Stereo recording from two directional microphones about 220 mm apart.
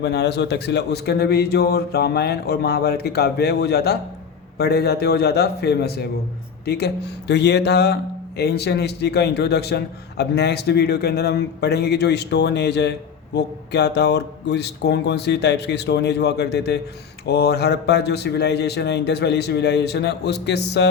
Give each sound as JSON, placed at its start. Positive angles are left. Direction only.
{"t": 0.0, "sound": "a man's voice", "side_deg": 50}